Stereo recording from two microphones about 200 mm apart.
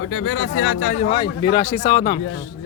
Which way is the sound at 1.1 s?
25° left (ahead or behind).